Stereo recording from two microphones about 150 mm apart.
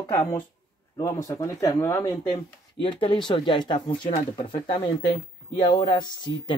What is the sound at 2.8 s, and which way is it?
Speech, 35° left (ahead or behind).